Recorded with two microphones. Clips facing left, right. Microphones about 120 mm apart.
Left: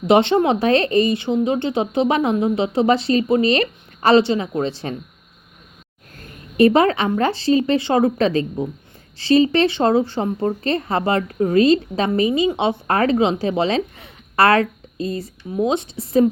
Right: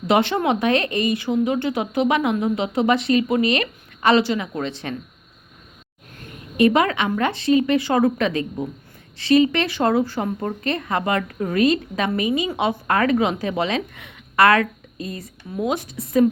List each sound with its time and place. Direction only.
0.1 s a woman's voice: 25° left (ahead or behind)
6.1 s a woman's voice: 35° left (ahead or behind)